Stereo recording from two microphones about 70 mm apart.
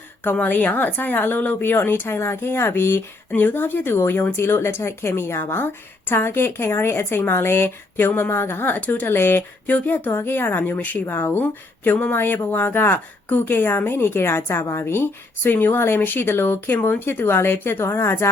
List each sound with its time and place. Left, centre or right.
0.3 s a woman's voice: left